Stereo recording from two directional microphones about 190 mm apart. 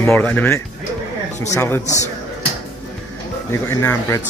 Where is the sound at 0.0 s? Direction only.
10° left (ahead or behind).